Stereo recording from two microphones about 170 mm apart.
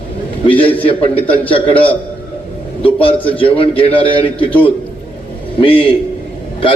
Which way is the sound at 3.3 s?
30° left (ahead or behind).